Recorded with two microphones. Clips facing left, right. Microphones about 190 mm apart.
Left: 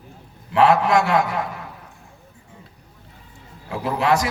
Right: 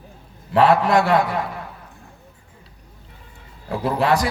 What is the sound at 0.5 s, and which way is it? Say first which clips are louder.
Speech: right 1 dB; 35° right (ahead or behind).